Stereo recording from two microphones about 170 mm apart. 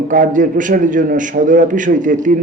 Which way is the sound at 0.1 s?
50° right (ahead or behind).